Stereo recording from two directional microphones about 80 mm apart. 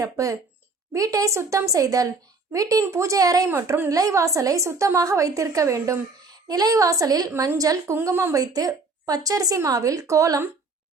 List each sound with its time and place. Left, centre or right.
0.0 s a woman's voice: right
4.9 s a woman's voice: right
8.1 s a woman's voice: right
8.4 s a woman's voice: right